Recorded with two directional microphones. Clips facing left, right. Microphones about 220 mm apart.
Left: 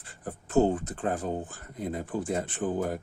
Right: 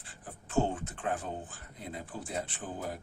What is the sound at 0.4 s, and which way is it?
Speech, 40° left (ahead or behind).